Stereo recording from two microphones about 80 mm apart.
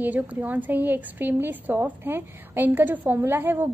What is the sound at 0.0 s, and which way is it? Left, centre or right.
A woman's voice, right.